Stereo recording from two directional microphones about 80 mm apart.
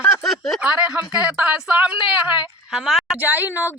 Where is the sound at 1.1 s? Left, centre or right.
Centre.